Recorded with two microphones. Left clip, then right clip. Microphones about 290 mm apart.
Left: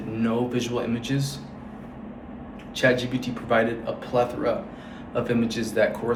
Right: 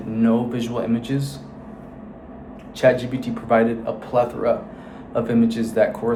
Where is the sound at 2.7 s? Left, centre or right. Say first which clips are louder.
Right 5 dB; centre.